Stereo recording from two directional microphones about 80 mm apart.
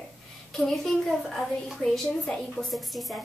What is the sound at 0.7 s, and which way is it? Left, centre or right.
A woman's voice, centre.